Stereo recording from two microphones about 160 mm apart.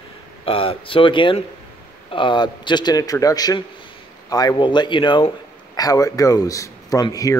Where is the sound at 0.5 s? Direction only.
35° left (ahead or behind).